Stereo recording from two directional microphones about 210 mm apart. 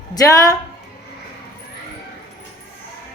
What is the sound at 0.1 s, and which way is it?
Speech, 15° left (ahead or behind).